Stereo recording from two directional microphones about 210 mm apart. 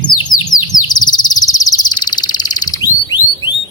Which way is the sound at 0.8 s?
20° left (ahead or behind).